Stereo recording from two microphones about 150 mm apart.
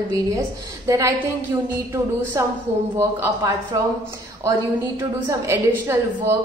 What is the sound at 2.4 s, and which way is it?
A woman's voice, 20° right (ahead or behind).